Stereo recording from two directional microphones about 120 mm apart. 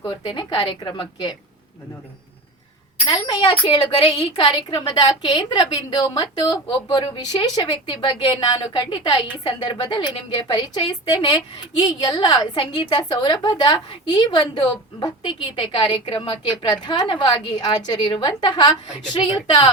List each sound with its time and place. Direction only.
0.3 s a woman's voice: 40° left (ahead or behind)
3.1 s a woman's voice: 35° left (ahead or behind)